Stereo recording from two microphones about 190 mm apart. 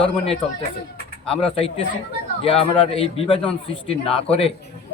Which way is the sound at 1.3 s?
30° left (ahead or behind).